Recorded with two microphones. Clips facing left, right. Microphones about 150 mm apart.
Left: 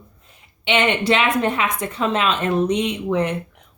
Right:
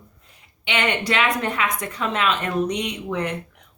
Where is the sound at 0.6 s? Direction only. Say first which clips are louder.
Left 5 dB; 25° left (ahead or behind).